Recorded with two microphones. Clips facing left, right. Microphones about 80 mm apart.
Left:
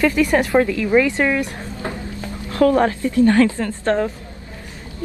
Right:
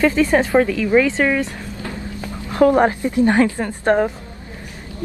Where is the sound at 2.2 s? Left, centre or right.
Right.